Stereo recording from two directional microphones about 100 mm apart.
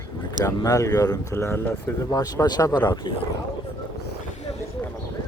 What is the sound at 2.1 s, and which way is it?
Speech, 40° left (ahead or behind).